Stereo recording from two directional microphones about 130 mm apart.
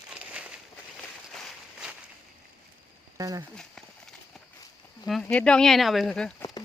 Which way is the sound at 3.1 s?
25° right (ahead or behind).